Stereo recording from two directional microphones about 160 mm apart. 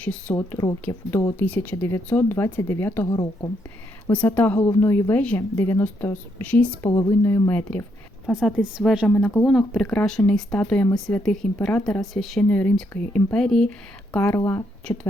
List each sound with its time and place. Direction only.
0.0 s speech: 5° left (ahead or behind)
3.1 s a woman's voice: 30° left (ahead or behind)
4.1 s speech: 10° left (ahead or behind)
6.9 s speech: 20° left (ahead or behind)
8.3 s a woman's voice: centre (ahead or behind)